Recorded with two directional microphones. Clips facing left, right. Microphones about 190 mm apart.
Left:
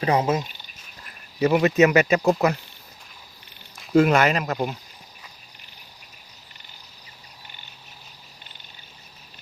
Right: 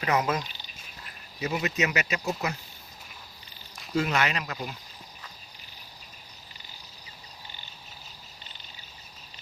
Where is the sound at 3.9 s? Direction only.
50° left (ahead or behind).